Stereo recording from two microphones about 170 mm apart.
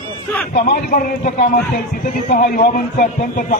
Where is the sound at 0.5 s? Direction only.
60° left (ahead or behind).